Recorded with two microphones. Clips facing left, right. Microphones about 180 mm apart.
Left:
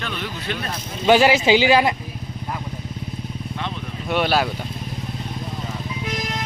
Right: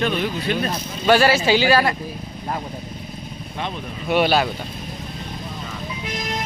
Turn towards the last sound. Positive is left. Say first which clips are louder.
# right 2 dB
turn(degrees=0)  # may be behind; listen again after turning